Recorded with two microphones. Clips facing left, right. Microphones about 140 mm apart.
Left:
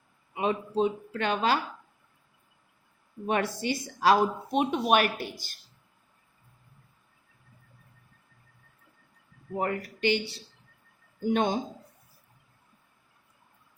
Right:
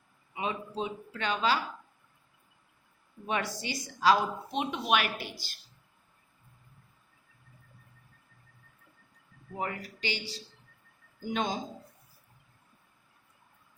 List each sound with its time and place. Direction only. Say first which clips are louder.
0.3 s speech: left 7 dB; 50° left (ahead or behind)
3.2 s speech: left 5 dB; 55° left (ahead or behind)
9.6 s speech: left 6 dB; 50° left (ahead or behind)